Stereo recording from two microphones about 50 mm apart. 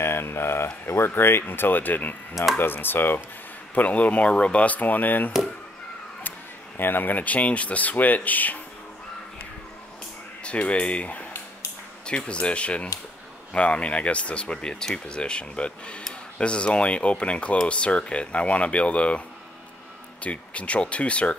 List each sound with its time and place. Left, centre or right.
0.0 s speech: left
3.7 s speech: left
6.8 s speech: left
10.4 s speech: left
20.2 s speech: left